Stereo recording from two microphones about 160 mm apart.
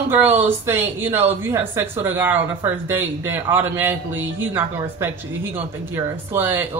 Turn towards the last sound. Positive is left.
turn(degrees=-15)  # may be behind; listen again after turning